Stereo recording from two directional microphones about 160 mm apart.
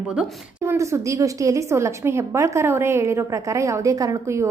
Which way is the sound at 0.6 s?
20° right (ahead or behind).